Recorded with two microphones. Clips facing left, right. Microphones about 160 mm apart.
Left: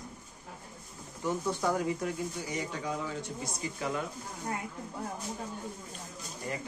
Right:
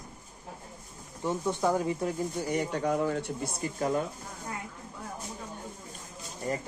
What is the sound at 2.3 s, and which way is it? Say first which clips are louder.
Speech: right 6 dB; 55° right (ahead or behind).